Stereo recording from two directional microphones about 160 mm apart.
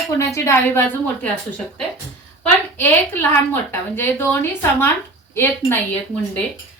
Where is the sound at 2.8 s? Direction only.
15° left (ahead or behind).